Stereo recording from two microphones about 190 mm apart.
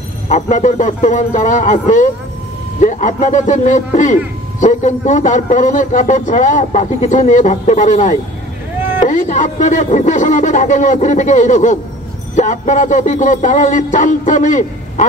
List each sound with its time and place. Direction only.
0.3 s a man's voice: 40° left (ahead or behind)